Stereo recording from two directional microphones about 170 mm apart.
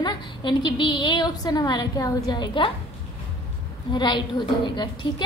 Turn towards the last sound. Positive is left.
turn(degrees=25)  # may be behind; listen again after turning